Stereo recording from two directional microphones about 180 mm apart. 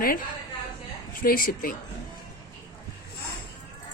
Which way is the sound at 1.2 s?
55° left (ahead or behind).